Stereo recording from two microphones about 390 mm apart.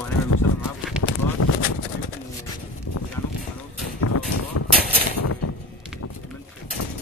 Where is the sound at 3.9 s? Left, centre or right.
Left.